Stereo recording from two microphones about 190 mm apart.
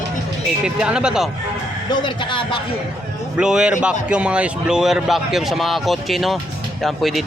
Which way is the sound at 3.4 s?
5° right (ahead or behind).